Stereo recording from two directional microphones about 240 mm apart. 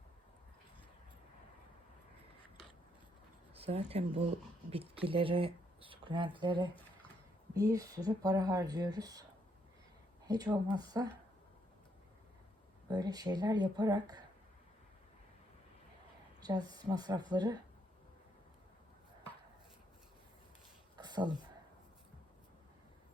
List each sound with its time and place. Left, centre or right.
3.5 s a sound: right
4.7 s speech: right
10.2 s speech: centre
12.9 s speech: centre
16.4 s speech: centre
20.9 s a sound: centre